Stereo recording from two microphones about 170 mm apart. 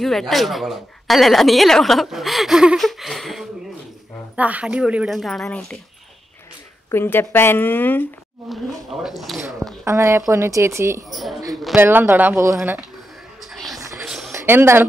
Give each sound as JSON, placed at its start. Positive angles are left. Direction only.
{"t": 0.0, "sound": "speech", "side_deg": 0}
{"t": 6.9, "sound": "a woman's voice", "side_deg": 15}
{"t": 8.5, "sound": "speech", "side_deg": 0}
{"t": 9.8, "sound": "speech", "side_deg": -15}
{"t": 11.1, "sound": "speech", "side_deg": 0}
{"t": 11.7, "sound": "speech", "side_deg": -10}
{"t": 13.4, "sound": "vehicle", "side_deg": 0}
{"t": 13.7, "sound": "music", "side_deg": -20}
{"t": 14.0, "sound": "a sound", "side_deg": -5}
{"t": 14.3, "sound": "speech", "side_deg": -15}